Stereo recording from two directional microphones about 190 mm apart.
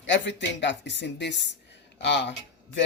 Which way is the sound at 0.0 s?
70° left (ahead or behind).